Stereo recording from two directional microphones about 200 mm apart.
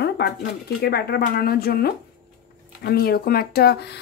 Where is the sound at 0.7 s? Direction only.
50° left (ahead or behind).